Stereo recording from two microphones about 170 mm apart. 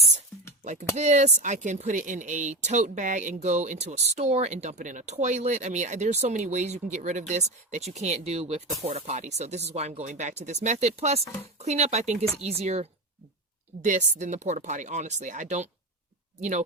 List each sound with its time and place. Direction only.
0.6 s music: 45° right (ahead or behind)
0.9 s speech: 45° right (ahead or behind)